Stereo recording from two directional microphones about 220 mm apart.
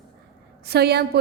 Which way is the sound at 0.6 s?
45° right (ahead or behind).